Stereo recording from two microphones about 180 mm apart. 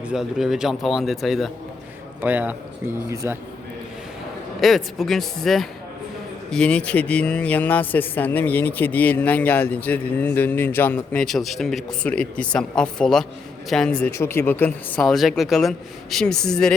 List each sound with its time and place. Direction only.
0.0 s a man's voice: 5° right (ahead or behind)
4.6 s speech: centre (ahead or behind)